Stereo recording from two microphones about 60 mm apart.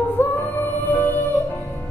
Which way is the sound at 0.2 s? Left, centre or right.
Left.